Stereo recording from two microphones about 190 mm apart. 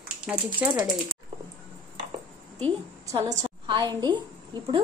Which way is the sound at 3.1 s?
25° right (ahead or behind).